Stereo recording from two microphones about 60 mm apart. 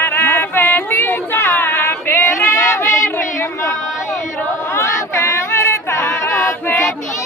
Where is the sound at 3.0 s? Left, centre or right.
Left.